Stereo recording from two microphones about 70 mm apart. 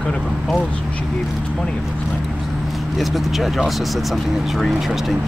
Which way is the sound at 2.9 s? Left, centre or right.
Centre.